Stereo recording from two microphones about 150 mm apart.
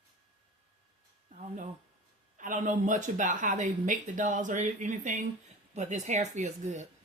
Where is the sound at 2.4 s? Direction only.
55° right (ahead or behind).